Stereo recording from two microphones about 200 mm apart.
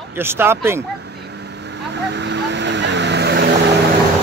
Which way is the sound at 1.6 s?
60° right (ahead or behind).